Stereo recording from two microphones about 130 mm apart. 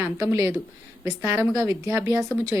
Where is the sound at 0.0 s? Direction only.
20° right (ahead or behind).